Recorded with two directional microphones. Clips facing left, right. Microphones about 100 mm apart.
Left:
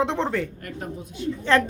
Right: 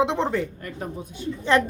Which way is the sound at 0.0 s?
15° right (ahead or behind).